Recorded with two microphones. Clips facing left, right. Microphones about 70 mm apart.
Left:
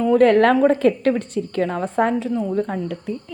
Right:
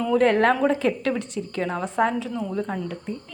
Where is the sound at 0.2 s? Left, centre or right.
Left.